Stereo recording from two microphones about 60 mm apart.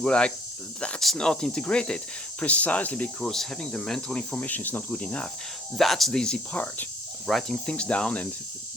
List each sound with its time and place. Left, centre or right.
0.0 s speech: centre
2.4 s cricket: left
3.2 s speech: centre
4.1 s cricket: centre
4.4 s cricket: left
5.7 s speech: centre
6.5 s cricket: left
7.3 s speech: centre
7.7 s cricket: centre